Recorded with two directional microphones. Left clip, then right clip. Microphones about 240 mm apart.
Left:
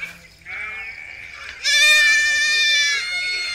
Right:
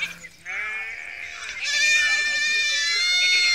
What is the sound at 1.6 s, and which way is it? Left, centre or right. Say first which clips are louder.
Goat: left 6 dB; centre.